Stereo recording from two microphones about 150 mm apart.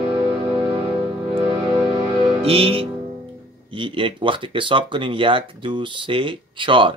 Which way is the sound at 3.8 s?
35° right (ahead or behind).